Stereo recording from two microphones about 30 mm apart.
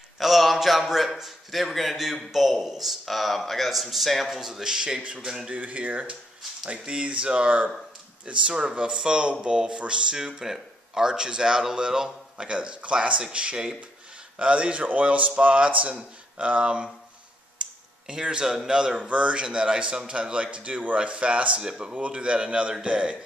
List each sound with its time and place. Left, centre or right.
0.2 s a sound: centre
1.1 s a man's voice: centre
4.4 s speech: centre
5.5 s speech: right
8.3 s speech: right
10.1 s speech: centre
12.4 s speech: right
14.4 s speech: right
14.9 s speech: right
17.6 s tick-tock: right
18.7 s speech: right
21.7 s speech: right